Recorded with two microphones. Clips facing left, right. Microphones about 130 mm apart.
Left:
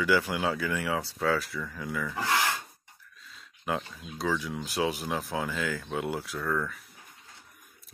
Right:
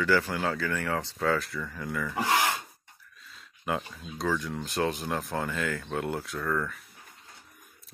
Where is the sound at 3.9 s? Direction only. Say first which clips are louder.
Right 1 dB; centre (ahead or behind).